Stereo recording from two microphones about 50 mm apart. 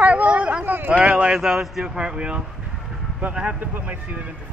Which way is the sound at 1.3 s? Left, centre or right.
Centre.